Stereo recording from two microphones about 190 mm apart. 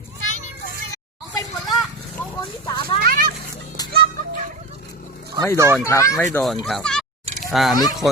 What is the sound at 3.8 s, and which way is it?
Music, 20° left (ahead or behind).